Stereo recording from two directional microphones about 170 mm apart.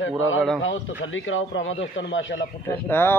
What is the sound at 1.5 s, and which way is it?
Speech, 90° left.